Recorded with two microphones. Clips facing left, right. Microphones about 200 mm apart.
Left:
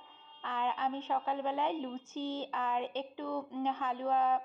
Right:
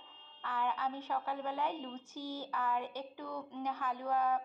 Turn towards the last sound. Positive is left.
turn(degrees=25)  # may be behind; listen again after turning